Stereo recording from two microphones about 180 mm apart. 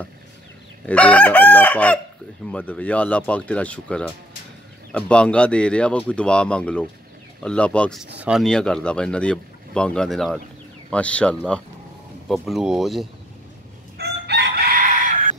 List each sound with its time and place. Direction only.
0.8 s speech: 10° left (ahead or behind)
13.9 s chicken: 65° right (ahead or behind); by 15.1 s 45° right (ahead or behind)